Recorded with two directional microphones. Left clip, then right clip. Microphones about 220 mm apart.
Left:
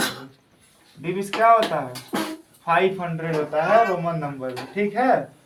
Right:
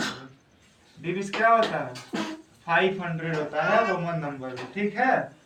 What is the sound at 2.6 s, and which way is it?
A man's voice, 25° left (ahead or behind).